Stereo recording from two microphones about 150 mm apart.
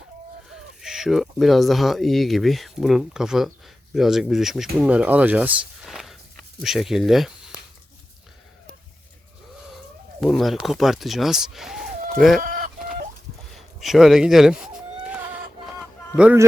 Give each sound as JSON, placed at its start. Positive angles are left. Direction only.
{"t": 0.8, "sound": "speech", "side_deg": 0}
{"t": 10.2, "sound": "speech", "side_deg": 0}
{"t": 12.4, "sound": "chicken", "side_deg": -70}
{"t": 13.5, "sound": "speech", "side_deg": 0}
{"t": 15.8, "sound": "a sound", "side_deg": -10}